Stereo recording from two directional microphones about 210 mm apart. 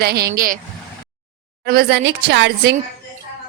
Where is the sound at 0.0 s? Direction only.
50° right (ahead or behind).